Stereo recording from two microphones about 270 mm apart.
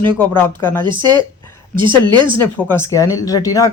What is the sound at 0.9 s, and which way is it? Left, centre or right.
Speech, centre.